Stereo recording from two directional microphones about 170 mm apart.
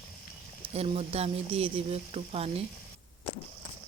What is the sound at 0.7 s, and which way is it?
Speech, 40° right (ahead or behind).